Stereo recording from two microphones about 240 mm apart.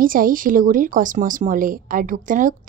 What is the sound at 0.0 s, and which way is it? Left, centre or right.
Speech, right.